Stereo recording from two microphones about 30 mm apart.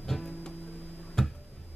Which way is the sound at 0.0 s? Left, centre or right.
Centre.